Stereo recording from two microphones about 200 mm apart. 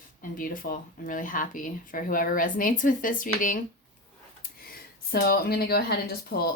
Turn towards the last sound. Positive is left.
turn(degrees=50)  # may be behind; listen again after turning